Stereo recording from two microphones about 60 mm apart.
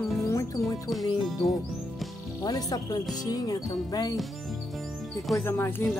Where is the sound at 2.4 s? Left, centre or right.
Left.